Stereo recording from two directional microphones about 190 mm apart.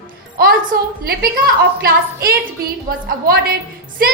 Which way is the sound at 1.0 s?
55° right (ahead or behind).